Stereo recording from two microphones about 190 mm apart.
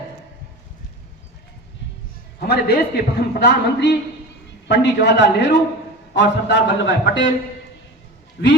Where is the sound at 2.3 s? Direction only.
55° left (ahead or behind); by 7.3 s 70° left (ahead or behind).